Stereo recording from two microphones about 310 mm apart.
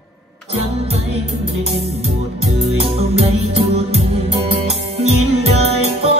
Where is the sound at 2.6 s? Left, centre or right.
Right.